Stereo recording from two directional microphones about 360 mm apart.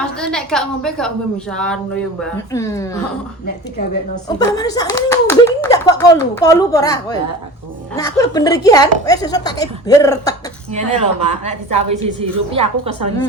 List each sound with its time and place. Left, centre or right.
0.0 s a woman's voice: centre
4.4 s speech: centre
10.7 s a woman's voice: centre